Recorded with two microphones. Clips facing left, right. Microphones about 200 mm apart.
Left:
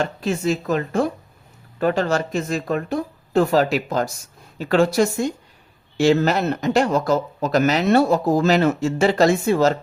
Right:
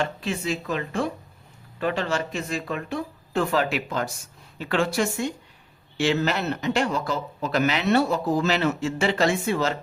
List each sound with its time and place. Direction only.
0.0 s speech: 45° left (ahead or behind)